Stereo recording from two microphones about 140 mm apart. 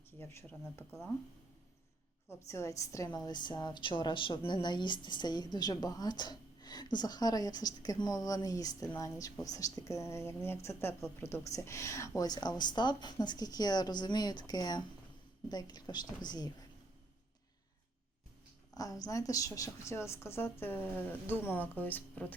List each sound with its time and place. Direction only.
0.2 s a woman's voice: 15° left (ahead or behind)
2.5 s a woman's voice: 20° left (ahead or behind)
18.8 s a woman's voice: 25° left (ahead or behind)